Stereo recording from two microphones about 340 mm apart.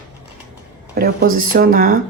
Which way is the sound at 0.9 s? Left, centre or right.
Right.